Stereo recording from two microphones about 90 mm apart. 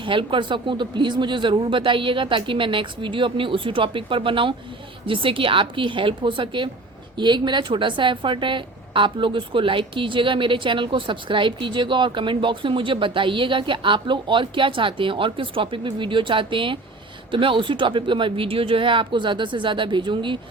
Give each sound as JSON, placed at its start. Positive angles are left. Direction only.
{"t": 0.0, "sound": "a woman's voice", "side_deg": -70}